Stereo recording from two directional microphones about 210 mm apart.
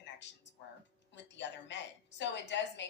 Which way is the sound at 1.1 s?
60° left (ahead or behind).